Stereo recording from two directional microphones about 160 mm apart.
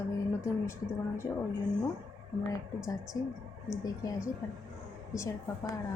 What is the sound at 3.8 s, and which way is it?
Speech, 20° left (ahead or behind).